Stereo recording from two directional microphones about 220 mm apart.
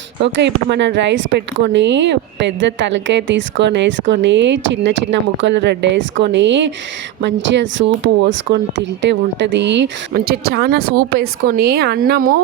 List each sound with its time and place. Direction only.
0.2 s speech: 55° right (ahead or behind)